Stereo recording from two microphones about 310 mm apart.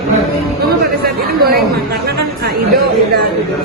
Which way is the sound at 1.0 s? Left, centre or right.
Right.